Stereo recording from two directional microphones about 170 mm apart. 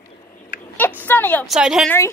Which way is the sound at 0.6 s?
10° left (ahead or behind).